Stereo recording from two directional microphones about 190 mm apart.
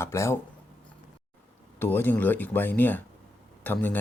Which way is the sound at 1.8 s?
10° left (ahead or behind).